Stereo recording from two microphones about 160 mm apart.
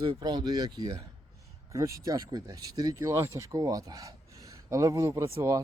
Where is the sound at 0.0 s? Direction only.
25° right (ahead or behind).